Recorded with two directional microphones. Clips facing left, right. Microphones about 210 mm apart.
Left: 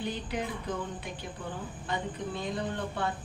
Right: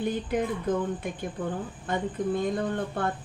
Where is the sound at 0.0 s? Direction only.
50° right (ahead or behind).